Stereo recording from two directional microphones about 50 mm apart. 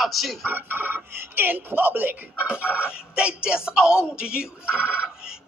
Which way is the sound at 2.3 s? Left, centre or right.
Right.